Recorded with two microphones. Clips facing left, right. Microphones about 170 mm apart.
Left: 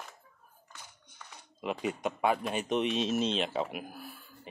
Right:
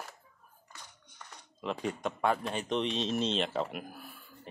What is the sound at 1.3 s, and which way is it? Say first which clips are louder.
Speech: left 1 dB; 10° left (ahead or behind).